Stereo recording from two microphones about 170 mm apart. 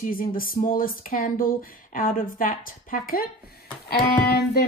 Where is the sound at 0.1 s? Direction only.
55° left (ahead or behind).